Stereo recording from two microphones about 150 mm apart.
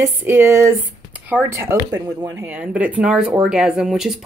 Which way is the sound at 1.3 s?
15° right (ahead or behind).